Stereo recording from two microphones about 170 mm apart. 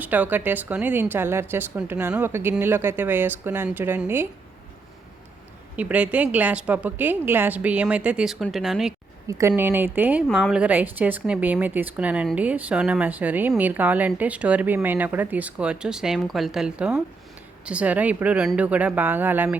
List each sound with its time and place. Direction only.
0.0 s speech: 10° right (ahead or behind)
5.7 s speech: 10° right (ahead or behind)
9.5 s speech: 10° right (ahead or behind)